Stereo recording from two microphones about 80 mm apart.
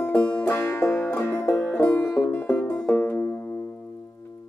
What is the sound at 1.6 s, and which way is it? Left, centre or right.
Music, centre.